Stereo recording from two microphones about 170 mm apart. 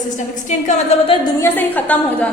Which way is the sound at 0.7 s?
35° left (ahead or behind).